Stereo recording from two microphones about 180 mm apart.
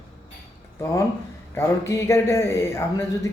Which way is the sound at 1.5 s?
15° left (ahead or behind).